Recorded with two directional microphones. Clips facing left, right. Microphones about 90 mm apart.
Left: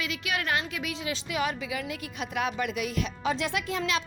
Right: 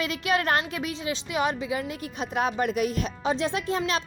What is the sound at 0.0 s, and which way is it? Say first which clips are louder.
A woman's voice: right 6 dB; 40° right (ahead or behind).